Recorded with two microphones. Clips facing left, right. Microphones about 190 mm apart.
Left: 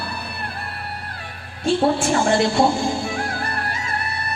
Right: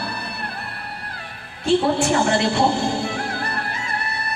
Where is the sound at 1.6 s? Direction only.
60° right (ahead or behind).